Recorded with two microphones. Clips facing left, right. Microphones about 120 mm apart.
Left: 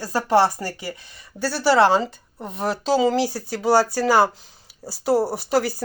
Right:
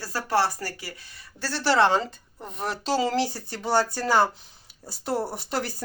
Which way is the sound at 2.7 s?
Centre (ahead or behind).